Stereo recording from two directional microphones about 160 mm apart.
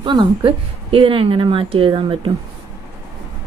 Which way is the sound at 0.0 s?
30° right (ahead or behind).